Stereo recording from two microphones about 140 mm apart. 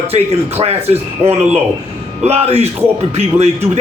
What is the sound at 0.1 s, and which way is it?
A man's voice, 45° right (ahead or behind).